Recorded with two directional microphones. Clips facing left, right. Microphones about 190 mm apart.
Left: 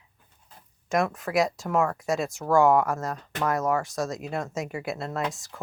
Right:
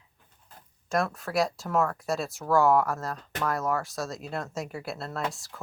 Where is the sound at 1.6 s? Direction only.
10° left (ahead or behind).